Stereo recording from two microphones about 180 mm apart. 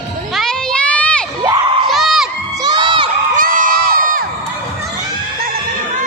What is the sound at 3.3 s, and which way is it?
Crowd, 50° right (ahead or behind).